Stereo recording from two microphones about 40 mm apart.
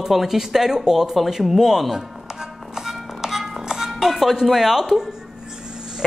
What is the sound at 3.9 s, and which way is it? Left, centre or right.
Music, centre.